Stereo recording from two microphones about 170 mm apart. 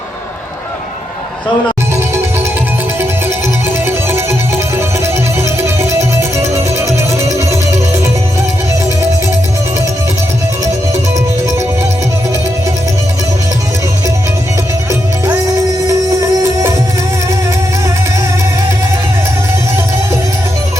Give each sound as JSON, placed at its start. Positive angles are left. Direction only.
{"t": 3.8, "sound": "music", "side_deg": -15}
{"t": 15.9, "sound": "music", "side_deg": -20}